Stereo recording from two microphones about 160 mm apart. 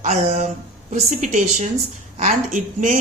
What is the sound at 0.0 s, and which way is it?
A woman's voice, 50° right (ahead or behind).